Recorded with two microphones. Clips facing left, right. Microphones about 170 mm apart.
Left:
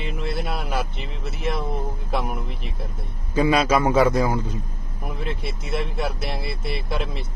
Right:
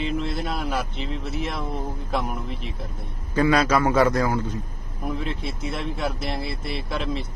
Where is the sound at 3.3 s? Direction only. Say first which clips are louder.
Left 1 dB; 10° left (ahead or behind).